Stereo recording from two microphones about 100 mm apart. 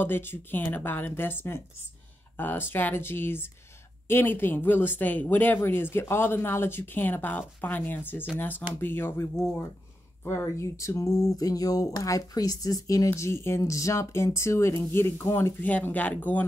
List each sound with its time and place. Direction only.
0.0 s speech: 20° left (ahead or behind)
10.2 s a sound: 25° left (ahead or behind)
14.9 s speech: 20° left (ahead or behind)